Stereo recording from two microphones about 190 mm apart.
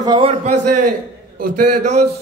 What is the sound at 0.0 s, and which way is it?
A man's voice, 25° right (ahead or behind).